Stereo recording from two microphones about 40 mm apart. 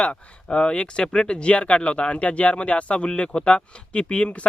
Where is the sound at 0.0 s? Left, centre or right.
Left.